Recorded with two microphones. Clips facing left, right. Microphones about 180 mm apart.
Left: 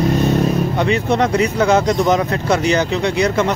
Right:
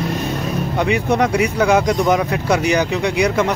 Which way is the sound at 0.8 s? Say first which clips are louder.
Right 1 dB; 10° right (ahead or behind).